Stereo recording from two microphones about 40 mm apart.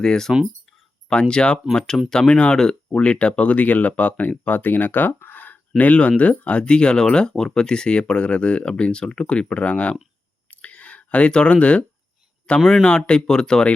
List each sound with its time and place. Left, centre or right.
0.0 s speech: centre; by 5.5 s left
5.7 s speech: left
10.5 s a sound: left
12.5 s speech: left